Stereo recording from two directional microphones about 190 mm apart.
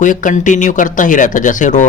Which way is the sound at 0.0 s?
45° left (ahead or behind).